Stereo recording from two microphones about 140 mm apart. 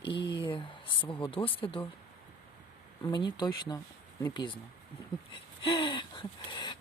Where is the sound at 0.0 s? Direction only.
35° left (ahead or behind).